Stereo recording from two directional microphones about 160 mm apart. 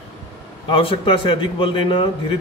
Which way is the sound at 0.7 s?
35° left (ahead or behind).